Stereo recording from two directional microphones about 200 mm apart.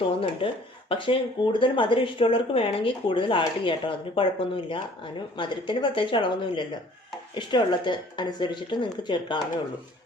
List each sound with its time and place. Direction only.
0.2 s speech: 25° left (ahead or behind)